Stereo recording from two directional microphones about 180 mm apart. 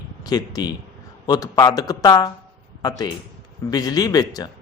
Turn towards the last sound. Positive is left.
turn(degrees=20)  # may be behind; listen again after turning